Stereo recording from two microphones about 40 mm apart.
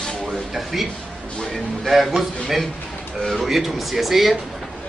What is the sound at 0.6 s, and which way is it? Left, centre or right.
Speech, centre.